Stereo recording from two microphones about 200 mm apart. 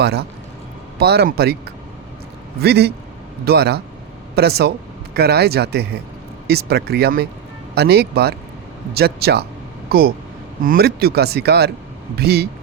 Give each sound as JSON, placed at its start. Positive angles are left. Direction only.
{"t": 0.0, "sound": "speech", "side_deg": -55}
{"t": 2.6, "sound": "speech", "side_deg": -55}
{"t": 10.6, "sound": "speech", "side_deg": -50}